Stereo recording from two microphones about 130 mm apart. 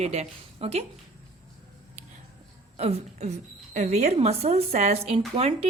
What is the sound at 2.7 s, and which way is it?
A woman's voice, 50° right (ahead or behind).